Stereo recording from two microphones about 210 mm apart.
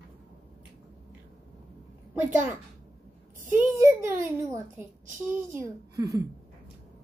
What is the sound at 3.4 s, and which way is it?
A child's voice, 10° right (ahead or behind).